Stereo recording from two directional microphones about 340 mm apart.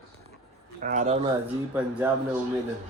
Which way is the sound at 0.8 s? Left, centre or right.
Right.